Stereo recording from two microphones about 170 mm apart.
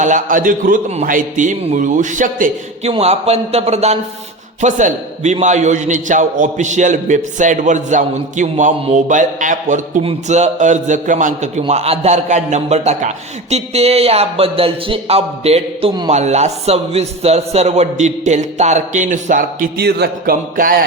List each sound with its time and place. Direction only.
0.0 s a man's voice: 50° right (ahead or behind)
2.9 s a man's voice: 40° right (ahead or behind); by 20.7 s 55° right (ahead or behind)